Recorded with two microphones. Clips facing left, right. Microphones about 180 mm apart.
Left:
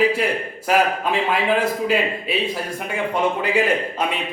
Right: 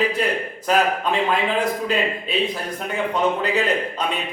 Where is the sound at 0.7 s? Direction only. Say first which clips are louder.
Left 1 dB; 10° left (ahead or behind).